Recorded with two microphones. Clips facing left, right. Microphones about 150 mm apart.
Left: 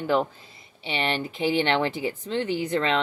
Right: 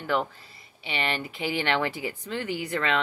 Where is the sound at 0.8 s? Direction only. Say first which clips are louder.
Left 3 dB; 20° left (ahead or behind).